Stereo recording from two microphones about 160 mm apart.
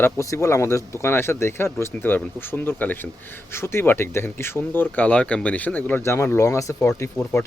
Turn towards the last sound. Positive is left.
turn(degrees=20)  # may be behind; listen again after turning